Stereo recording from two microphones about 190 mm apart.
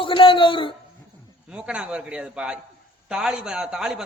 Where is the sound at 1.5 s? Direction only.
5° right (ahead or behind).